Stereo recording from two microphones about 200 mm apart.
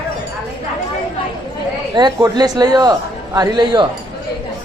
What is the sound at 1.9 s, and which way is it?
Speech, 20° right (ahead or behind).